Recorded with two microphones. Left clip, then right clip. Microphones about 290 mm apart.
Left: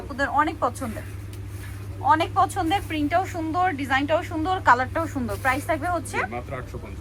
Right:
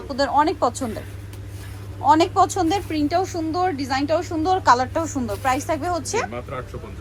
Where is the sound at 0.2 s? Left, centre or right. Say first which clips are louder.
Right 4 dB; centre.